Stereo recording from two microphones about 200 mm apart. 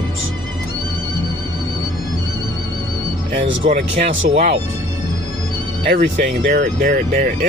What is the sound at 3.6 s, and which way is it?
Speech, 35° right (ahead or behind).